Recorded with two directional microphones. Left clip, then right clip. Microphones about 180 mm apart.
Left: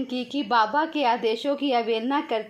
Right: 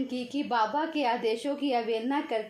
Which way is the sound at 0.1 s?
30° left (ahead or behind).